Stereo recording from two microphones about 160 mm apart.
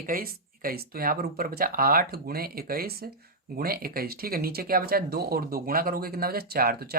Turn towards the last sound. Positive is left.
turn(degrees=-70)  # may be behind; listen again after turning